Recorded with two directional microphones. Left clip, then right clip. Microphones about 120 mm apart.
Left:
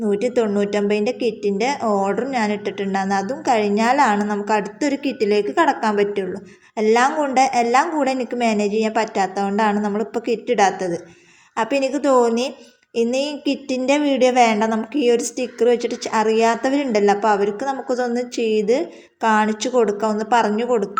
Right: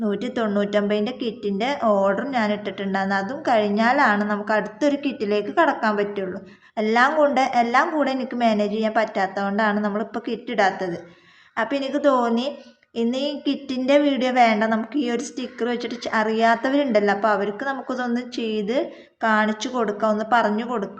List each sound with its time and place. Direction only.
0.0 s a woman's voice: 15° left (ahead or behind)